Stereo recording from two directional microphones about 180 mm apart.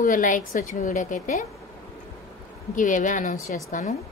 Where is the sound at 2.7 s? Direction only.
45° left (ahead or behind).